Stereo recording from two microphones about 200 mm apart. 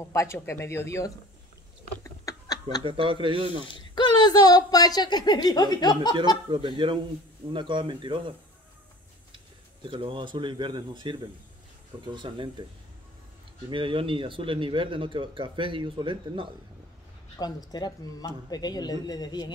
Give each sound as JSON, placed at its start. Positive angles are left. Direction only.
{"t": 0.1, "sound": "speech", "side_deg": 15}
{"t": 2.0, "sound": "a sound", "side_deg": 15}
{"t": 2.8, "sound": "speech", "side_deg": -25}
{"t": 3.6, "sound": "speech", "side_deg": 25}
{"t": 6.5, "sound": "speech", "side_deg": -25}
{"t": 9.8, "sound": "speech", "side_deg": -25}
{"t": 13.7, "sound": "speech", "side_deg": -25}
{"t": 17.4, "sound": "speech", "side_deg": 20}